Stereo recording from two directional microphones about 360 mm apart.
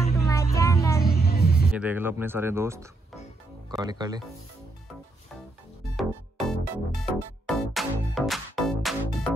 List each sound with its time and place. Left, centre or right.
0.2 s vehicle: centre
1.0 s music: left
1.7 s speech: centre
5.9 s music: centre